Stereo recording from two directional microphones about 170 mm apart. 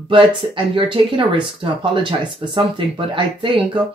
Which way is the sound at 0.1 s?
30° right (ahead or behind).